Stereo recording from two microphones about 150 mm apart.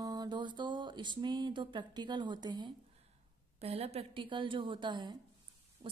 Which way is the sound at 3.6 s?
45° right (ahead or behind).